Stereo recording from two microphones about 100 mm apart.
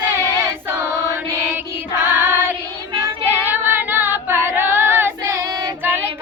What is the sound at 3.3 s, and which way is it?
Child singing, 20° right (ahead or behind).